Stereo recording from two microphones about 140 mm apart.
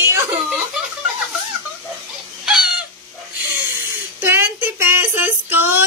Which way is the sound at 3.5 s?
15° right (ahead or behind).